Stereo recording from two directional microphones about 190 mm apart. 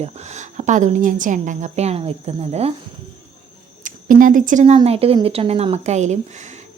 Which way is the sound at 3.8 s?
45° right (ahead or behind).